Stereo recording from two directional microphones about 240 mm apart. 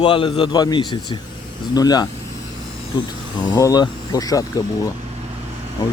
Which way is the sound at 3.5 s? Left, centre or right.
Centre.